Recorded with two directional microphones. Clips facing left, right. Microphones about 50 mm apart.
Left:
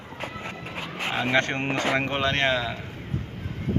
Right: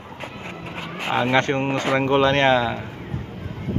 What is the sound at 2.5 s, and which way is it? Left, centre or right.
Speech, centre.